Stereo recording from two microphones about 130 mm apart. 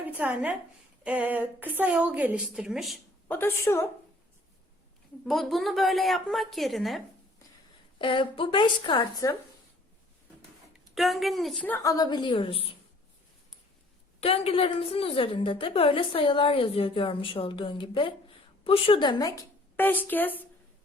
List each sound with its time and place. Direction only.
0.0 s a woman's voice: 10° right (ahead or behind)
3.2 s a woman's voice: 15° left (ahead or behind)
5.2 s a woman's voice: centre (ahead or behind)
7.9 s a woman's voice: 40° left (ahead or behind)
10.9 s a woman's voice: centre (ahead or behind)
11.8 s a woman's voice: 30° left (ahead or behind); by 12.7 s 45° left (ahead or behind)
14.2 s a woman's voice: 50° left (ahead or behind); by 19.5 s 30° left (ahead or behind)
19.7 s a woman's voice: 15° left (ahead or behind)